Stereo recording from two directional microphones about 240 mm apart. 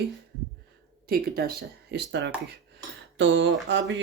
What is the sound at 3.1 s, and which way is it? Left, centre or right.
Dishes, right.